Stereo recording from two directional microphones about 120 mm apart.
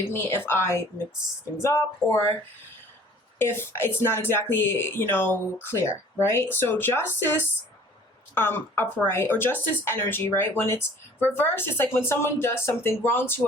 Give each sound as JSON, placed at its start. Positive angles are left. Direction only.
{"t": 0.1, "sound": "speech", "side_deg": 20}
{"t": 3.4, "sound": "speech", "side_deg": 20}